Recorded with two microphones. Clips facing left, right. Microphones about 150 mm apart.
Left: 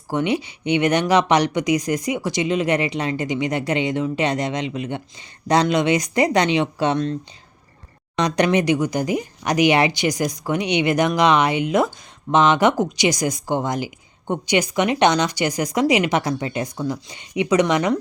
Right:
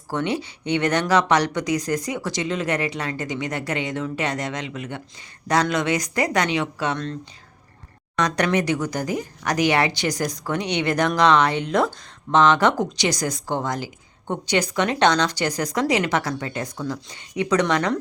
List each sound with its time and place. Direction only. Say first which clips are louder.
0.1 s speech: left 3 dB; 15° left (ahead or behind)